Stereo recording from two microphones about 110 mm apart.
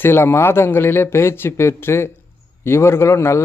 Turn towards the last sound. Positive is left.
turn(degrees=25)  # may be behind; listen again after turning